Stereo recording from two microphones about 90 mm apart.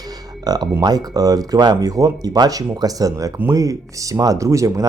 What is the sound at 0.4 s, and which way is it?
Speech, 45° right (ahead or behind).